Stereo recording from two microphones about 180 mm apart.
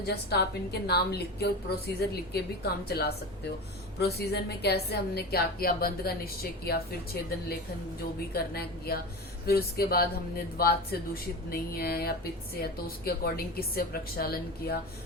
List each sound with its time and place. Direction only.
0.0 s a woman's voice: 65° left (ahead or behind)